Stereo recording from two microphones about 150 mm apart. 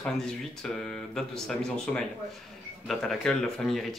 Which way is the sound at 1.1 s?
5° left (ahead or behind).